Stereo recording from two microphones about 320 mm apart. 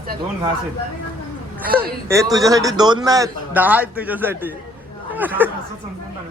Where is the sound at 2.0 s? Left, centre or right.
Centre.